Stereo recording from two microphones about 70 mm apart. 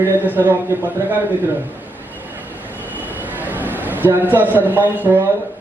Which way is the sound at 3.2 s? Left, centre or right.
Right.